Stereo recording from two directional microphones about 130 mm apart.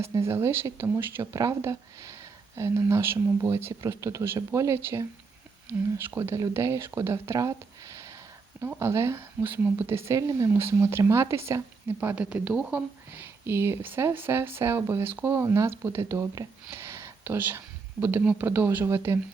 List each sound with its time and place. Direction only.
0.0 s speech: 20° right (ahead or behind)